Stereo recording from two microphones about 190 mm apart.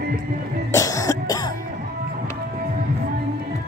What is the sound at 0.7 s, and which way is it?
Music, 15° left (ahead or behind).